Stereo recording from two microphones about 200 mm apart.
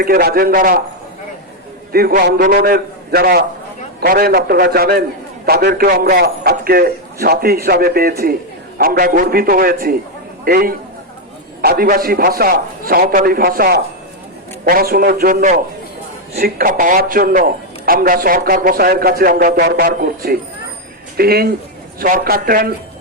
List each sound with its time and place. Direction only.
0.0 s a man's voice: 50° right (ahead or behind)
1.9 s a man's voice: 50° right (ahead or behind)